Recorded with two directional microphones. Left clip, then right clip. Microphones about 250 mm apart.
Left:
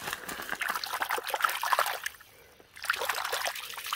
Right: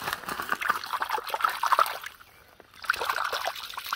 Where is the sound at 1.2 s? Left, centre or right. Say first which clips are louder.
Right 2 dB; centre.